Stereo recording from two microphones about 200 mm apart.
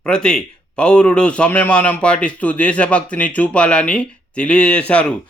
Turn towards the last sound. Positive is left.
turn(degrees=5)  # may be behind; listen again after turning